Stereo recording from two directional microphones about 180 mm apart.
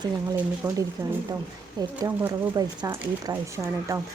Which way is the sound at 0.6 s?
5° right (ahead or behind).